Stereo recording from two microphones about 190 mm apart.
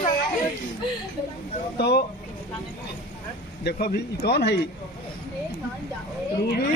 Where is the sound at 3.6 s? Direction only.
55° left (ahead or behind).